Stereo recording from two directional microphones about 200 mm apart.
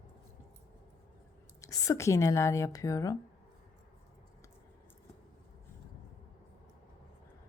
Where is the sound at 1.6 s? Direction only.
15° left (ahead or behind).